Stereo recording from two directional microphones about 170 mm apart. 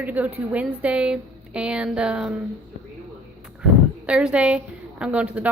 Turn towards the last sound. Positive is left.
turn(degrees=-10)  # may be behind; listen again after turning